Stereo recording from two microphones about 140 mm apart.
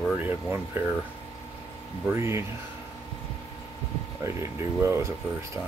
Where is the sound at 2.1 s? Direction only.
20° right (ahead or behind).